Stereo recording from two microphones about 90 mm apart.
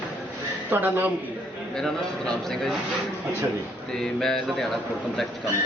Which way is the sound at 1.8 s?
5° left (ahead or behind).